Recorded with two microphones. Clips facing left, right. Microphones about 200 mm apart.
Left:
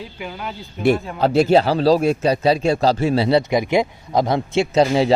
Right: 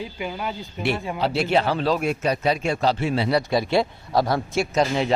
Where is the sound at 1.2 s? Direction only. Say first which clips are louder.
Left 7 dB; 45° left (ahead or behind).